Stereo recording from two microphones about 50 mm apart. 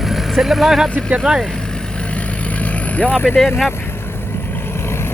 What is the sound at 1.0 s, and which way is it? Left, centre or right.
Speech, centre.